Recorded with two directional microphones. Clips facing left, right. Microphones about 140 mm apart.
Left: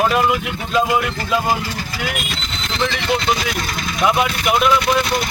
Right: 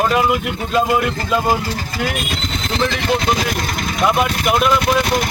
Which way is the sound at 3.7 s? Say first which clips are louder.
Right 2 dB; 50° right (ahead or behind).